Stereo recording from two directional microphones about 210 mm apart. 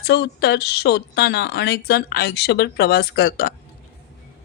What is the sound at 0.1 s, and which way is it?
A woman's voice, 55° left (ahead or behind).